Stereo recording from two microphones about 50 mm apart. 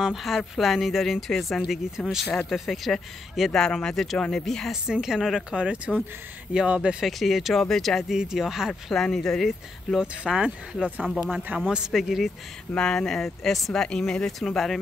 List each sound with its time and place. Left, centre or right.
0.0 s speech: centre
5.2 s speech: centre
5.6 s speech: right
7.1 s speech: centre
8.1 s speech: centre
8.9 s speech: centre
9.9 s speech: centre
11.5 s speech: right
11.9 s speech: centre
12.7 s speech: centre
13.7 s speech: centre
14.5 s speech: centre